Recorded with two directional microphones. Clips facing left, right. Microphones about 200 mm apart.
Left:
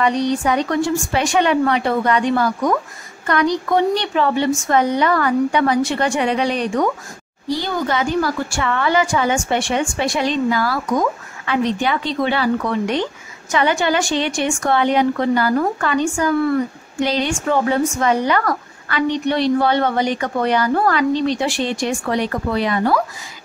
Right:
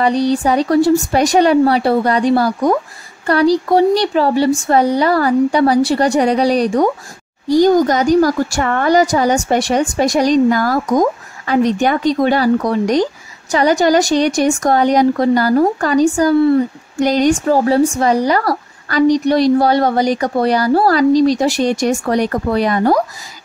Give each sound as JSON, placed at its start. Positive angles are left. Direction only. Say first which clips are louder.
{"t": 0.0, "sound": "speech", "louder": "right 4 dB", "side_deg": -35}
{"t": 17.0, "sound": "speech", "louder": "right 7 dB", "side_deg": -45}